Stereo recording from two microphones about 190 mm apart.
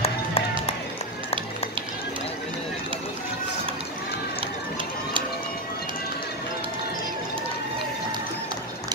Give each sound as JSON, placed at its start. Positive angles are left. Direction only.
{"t": 0.0, "sound": "music", "side_deg": 30}